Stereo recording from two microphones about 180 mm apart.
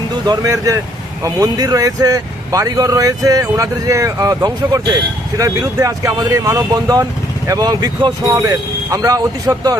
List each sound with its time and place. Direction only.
0.3 s speech: 20° right (ahead or behind)